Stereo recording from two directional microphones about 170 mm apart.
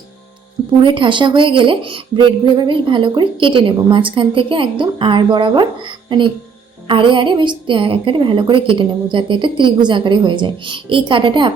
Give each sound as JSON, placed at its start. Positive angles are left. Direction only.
{"t": 0.8, "sound": "a woman's voice", "side_deg": -30}